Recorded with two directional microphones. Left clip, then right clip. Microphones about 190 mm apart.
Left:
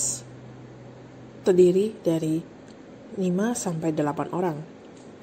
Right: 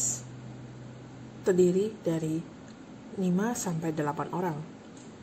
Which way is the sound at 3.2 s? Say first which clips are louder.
Left 4 dB; 20° left (ahead or behind).